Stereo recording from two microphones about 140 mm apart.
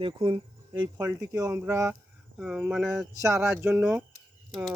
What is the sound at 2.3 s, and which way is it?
Speech, 5° right (ahead or behind).